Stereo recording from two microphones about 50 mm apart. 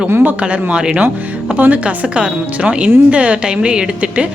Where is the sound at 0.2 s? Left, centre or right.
Right.